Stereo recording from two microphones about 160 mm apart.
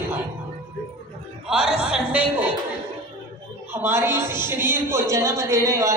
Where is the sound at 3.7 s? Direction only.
15° right (ahead or behind).